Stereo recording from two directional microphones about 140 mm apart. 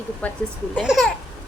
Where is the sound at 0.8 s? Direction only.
5° right (ahead or behind).